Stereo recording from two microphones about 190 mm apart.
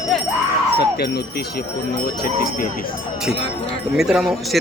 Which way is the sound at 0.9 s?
55° left (ahead or behind).